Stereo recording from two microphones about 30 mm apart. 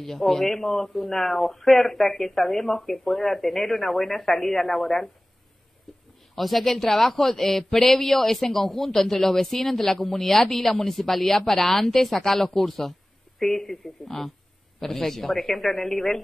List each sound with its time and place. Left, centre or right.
0.0 s speech: centre
1.0 s speech: left
1.3 s speech: centre
5.9 s a sound: centre
6.3 s speech: centre